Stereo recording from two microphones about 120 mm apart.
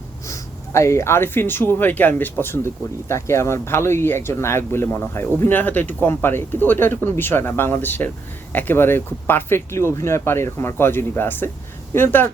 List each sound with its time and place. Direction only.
0.3 s speech: 25° left (ahead or behind)